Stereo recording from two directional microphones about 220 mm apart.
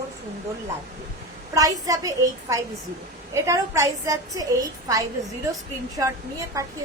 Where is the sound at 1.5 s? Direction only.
15° right (ahead or behind).